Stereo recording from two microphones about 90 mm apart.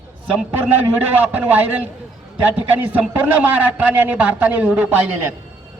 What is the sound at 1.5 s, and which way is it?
Speech, 20° right (ahead or behind).